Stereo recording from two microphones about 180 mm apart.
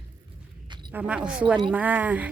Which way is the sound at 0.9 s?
5° right (ahead or behind).